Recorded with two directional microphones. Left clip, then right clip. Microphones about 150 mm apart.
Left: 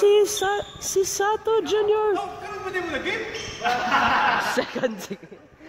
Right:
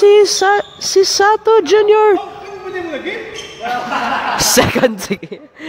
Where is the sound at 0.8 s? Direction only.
25° right (ahead or behind).